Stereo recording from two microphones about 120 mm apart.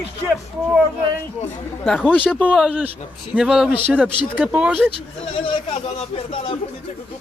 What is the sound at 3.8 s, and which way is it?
Speech, 15° right (ahead or behind).